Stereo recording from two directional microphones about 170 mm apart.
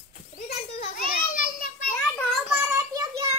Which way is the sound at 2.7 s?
20° right (ahead or behind).